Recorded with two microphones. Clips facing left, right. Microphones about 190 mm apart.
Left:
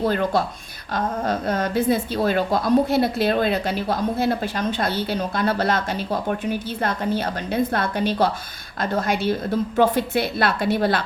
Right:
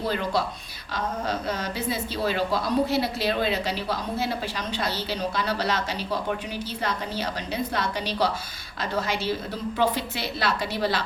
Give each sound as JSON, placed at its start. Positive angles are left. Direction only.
{"t": 0.1, "sound": "a woman's voice", "side_deg": 50}